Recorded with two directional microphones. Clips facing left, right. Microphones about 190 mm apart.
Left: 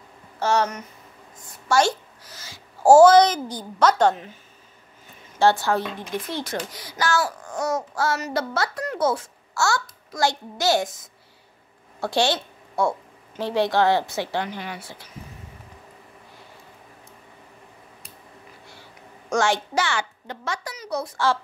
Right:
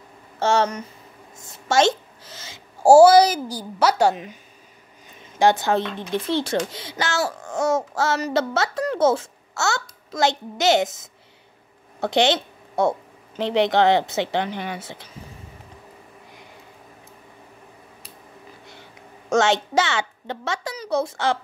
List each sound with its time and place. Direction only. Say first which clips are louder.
0.4 s a woman's voice: right 2 dB; 25° right (ahead or behind)
2.8 s a child's voice: right 1 dB; 10° right (ahead or behind)
5.4 s a woman's voice: right 1 dB; 20° right (ahead or behind)
18.7 s a woman's voice: right 2 dB; 20° right (ahead or behind)